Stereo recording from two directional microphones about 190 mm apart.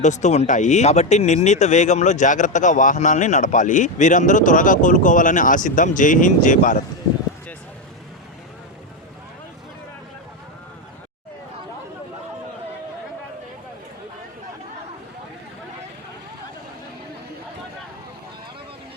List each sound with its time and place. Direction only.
0.0 s a man's voice: 40° left (ahead or behind)